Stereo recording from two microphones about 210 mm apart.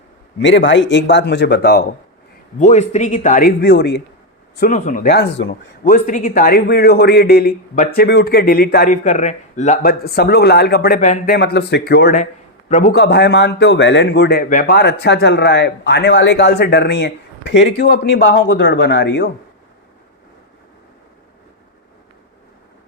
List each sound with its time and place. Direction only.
0.3 s a man's voice: 60° left (ahead or behind)
2.6 s speech: 35° left (ahead or behind)
3.6 s speech: 55° left (ahead or behind)
4.5 s speech: 40° left (ahead or behind)
8.9 s speech: 35° left (ahead or behind)
10.0 s speech: 50° left (ahead or behind)
11.3 s speech: 55° left (ahead or behind)
12.1 s a sound: 35° left (ahead or behind)
12.9 s a man's voice: 55° left (ahead or behind)